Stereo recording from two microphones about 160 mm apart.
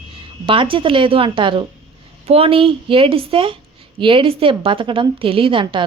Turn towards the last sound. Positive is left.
turn(degrees=-30)  # may be behind; listen again after turning